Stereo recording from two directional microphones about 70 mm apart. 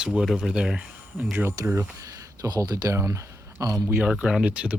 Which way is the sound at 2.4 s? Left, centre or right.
Right.